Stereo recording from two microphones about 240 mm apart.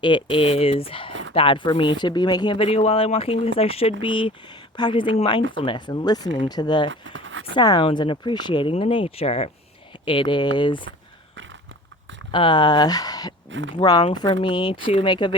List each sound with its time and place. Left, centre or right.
0.0 s speech: left
6.9 s a sound: right
7.5 s speech: centre
12.3 s speech: centre
13.5 s speech: right
13.7 s speech: centre